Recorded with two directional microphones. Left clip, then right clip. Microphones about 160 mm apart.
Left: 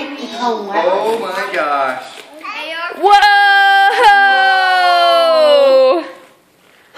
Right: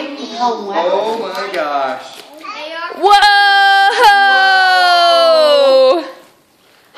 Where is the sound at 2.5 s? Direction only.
50° left (ahead or behind).